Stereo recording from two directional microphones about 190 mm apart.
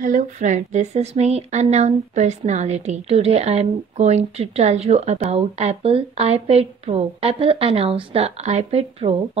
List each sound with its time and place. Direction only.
0.0 s speech: 40° right (ahead or behind)